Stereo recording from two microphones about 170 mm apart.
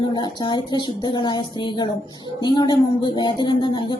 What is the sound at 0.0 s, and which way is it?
Speech, 25° left (ahead or behind).